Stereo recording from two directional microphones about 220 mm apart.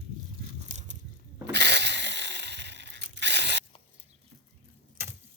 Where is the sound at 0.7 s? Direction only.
30° right (ahead or behind).